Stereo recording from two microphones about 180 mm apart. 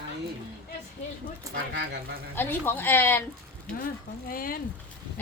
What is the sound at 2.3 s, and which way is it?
Speech, 10° left (ahead or behind).